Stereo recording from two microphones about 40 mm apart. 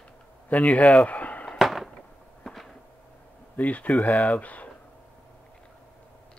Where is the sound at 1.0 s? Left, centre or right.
Left.